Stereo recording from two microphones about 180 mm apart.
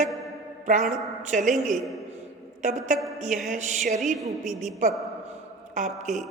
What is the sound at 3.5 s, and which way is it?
A man's voice, 40° right (ahead or behind).